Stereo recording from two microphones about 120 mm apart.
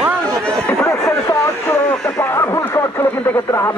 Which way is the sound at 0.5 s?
10° left (ahead or behind).